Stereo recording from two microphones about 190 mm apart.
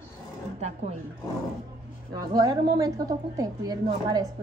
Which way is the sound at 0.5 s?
35° right (ahead or behind).